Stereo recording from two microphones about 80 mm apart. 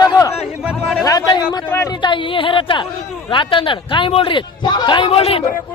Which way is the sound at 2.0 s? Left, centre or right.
Left.